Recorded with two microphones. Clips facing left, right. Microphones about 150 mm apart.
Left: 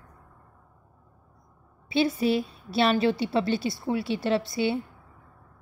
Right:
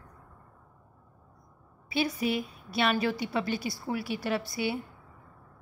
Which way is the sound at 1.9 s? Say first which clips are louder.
Left 5 dB; 25° left (ahead or behind).